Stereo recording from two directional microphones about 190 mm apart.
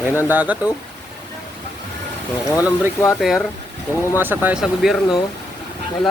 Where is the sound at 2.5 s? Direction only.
15° left (ahead or behind).